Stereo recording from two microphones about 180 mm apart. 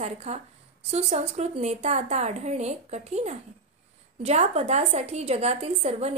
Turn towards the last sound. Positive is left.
turn(degrees=-35)  # may be behind; listen again after turning